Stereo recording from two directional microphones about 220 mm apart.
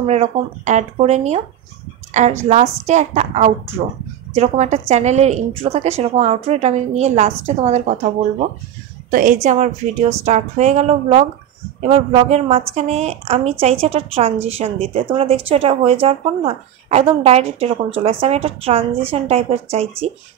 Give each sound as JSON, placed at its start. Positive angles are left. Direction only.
{"t": 0.0, "sound": "a woman's voice", "side_deg": -30}
{"t": 2.4, "sound": "a woman's voice", "side_deg": -30}